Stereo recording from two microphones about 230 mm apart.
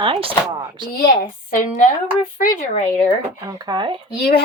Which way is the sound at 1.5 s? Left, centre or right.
Left.